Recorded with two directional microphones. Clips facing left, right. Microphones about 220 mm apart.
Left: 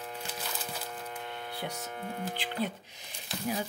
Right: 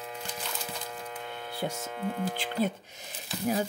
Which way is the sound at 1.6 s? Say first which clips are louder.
Right 6 dB; 45° right (ahead or behind).